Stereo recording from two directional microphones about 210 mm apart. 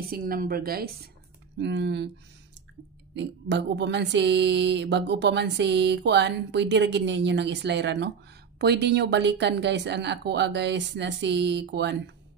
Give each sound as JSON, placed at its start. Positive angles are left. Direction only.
{"t": 0.1, "sound": "a woman's voice", "side_deg": -45}
{"t": 3.2, "sound": "speech", "side_deg": -55}